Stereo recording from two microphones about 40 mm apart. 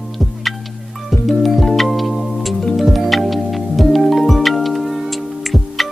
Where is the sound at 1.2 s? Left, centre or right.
Centre.